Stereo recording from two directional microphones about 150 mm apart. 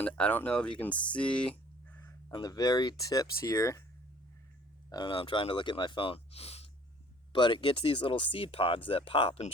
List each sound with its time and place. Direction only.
0.0 s speech: 10° left (ahead or behind)
2.3 s speech: 25° left (ahead or behind)
4.9 s speech: 30° left (ahead or behind)